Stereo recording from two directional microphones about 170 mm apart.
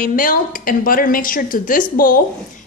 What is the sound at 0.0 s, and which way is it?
Speech, 55° left (ahead or behind).